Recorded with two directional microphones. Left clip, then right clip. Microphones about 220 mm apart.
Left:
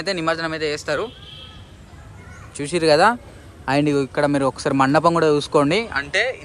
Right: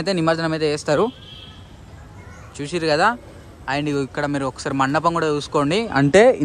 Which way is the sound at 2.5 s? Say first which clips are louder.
Left 4 dB; 10° right (ahead or behind).